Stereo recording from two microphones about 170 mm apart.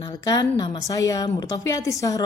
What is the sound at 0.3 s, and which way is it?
A woman's voice, 25° left (ahead or behind).